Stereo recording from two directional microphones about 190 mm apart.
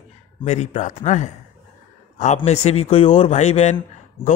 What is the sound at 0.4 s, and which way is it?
Speech, 40° left (ahead or behind).